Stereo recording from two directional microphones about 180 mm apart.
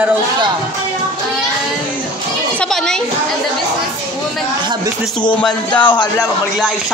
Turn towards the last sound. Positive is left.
turn(degrees=5)  # may be behind; listen again after turning